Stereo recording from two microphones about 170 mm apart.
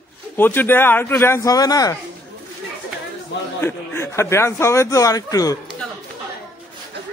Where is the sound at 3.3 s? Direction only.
90° left.